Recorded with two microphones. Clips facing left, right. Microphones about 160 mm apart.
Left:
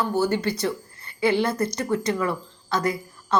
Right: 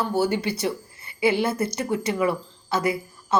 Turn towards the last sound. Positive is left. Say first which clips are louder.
# right 1 dB
turn(degrees=-10)  # may be behind; listen again after turning